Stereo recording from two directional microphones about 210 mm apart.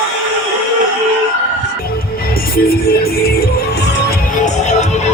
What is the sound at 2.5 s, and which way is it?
Music, 45° left (ahead or behind).